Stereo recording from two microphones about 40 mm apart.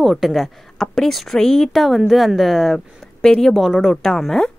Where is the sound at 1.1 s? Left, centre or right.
Centre.